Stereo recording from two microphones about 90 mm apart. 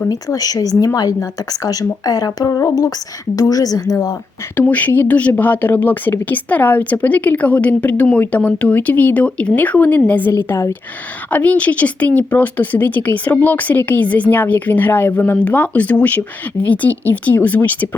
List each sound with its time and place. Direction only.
0.1 s speech: 40° left (ahead or behind)
4.5 s speech: 20° left (ahead or behind)
11.3 s speech: 15° left (ahead or behind)